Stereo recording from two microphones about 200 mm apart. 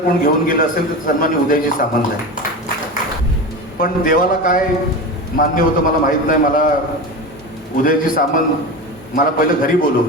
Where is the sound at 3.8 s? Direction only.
45° left (ahead or behind).